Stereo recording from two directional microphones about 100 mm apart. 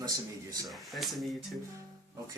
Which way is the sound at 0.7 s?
Centre (ahead or behind).